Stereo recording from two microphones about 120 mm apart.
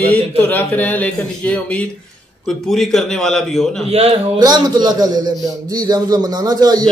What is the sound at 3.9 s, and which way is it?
Speech, 60° right (ahead or behind).